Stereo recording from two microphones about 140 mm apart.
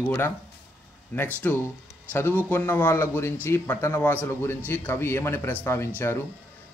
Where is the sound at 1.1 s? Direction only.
15° left (ahead or behind).